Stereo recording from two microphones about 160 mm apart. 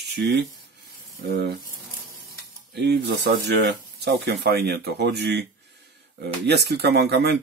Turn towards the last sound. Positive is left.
turn(degrees=-90)